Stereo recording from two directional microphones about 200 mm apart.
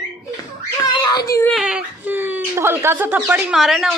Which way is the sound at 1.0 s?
20° left (ahead or behind).